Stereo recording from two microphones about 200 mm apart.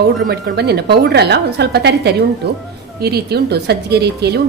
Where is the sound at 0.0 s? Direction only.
55° right (ahead or behind).